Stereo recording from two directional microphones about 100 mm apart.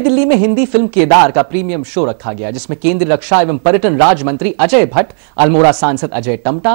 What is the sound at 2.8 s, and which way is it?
Speech, 5° left (ahead or behind).